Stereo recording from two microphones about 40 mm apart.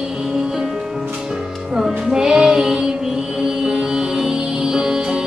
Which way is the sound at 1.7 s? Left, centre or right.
Centre.